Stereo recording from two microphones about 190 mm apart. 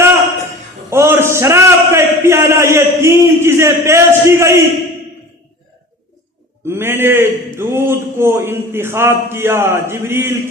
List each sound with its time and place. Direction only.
0.9 s a man's voice: 15° right (ahead or behind)
6.7 s a man's voice: 10° right (ahead or behind)